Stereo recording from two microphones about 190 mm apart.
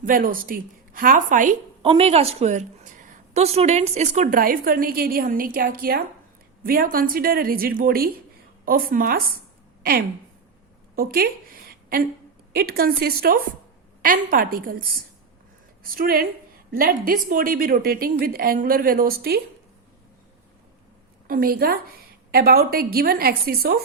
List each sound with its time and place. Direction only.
0.0 s a woman's voice: 45° right (ahead or behind)
1.8 s a woman's voice: 30° right (ahead or behind); by 9.2 s 50° right (ahead or behind)
10.9 s a sound: 50° right (ahead or behind)
12.5 s a woman's voice: 55° right (ahead or behind)
21.2 s a woman's voice: 50° right (ahead or behind)